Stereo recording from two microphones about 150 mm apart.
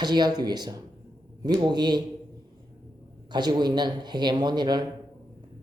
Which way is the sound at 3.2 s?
30° right (ahead or behind).